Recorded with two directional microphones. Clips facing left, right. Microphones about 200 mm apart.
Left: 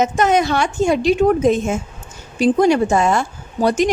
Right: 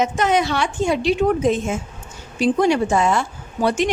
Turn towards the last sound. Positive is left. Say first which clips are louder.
# left 3 dB
turn(degrees=40)  # may be behind; listen again after turning